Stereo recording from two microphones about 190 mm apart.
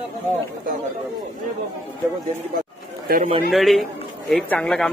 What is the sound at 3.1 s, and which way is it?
Speech, 50° right (ahead or behind).